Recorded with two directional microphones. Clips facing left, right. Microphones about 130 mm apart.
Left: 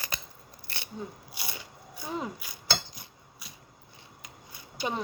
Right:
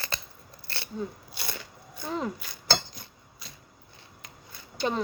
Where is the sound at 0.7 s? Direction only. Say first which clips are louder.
Right 5 dB; 15° left (ahead or behind).